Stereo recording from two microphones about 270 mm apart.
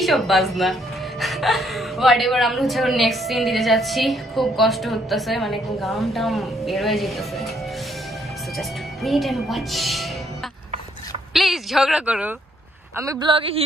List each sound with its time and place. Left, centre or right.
0.0 s speech: centre
8.5 s speech: centre
11.3 s speech: centre